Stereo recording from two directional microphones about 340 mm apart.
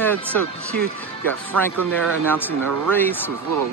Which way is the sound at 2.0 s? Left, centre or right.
Centre.